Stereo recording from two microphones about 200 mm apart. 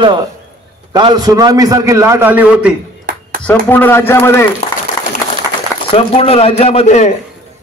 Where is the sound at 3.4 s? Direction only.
10° left (ahead or behind).